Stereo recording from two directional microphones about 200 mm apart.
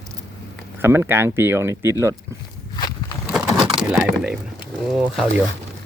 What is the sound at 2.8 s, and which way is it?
Walk, 20° left (ahead or behind).